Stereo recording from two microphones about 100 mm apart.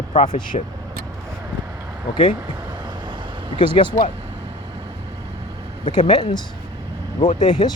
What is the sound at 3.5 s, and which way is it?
Speech, 55° left (ahead or behind).